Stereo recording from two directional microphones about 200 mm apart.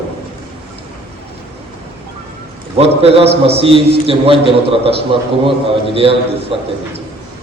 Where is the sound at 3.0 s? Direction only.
30° right (ahead or behind).